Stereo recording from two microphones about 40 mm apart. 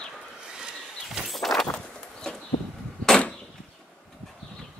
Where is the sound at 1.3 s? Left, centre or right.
Centre.